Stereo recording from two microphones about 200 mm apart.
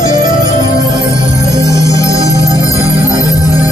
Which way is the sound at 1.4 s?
20° right (ahead or behind).